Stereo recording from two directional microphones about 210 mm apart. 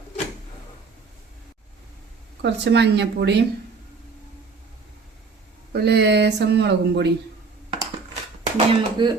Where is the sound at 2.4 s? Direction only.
55° right (ahead or behind).